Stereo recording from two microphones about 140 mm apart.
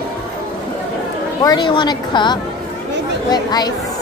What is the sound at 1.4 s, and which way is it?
A woman's voice, 30° left (ahead or behind).